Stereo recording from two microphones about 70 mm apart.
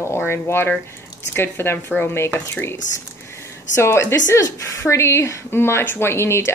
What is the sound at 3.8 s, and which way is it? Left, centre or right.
Speech, left.